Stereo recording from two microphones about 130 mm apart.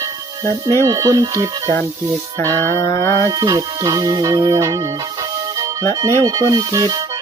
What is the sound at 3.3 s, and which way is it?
Speech, 30° right (ahead or behind).